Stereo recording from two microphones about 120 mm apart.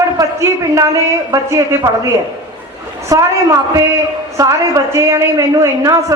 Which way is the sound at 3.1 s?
25° right (ahead or behind).